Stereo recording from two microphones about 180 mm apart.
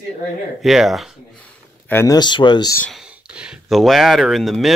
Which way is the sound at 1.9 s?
20° left (ahead or behind).